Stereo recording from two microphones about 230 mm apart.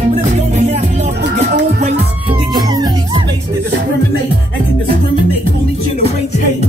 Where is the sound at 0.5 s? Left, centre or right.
Right.